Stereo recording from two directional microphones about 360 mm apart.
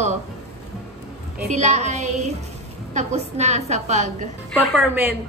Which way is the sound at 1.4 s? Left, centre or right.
Centre.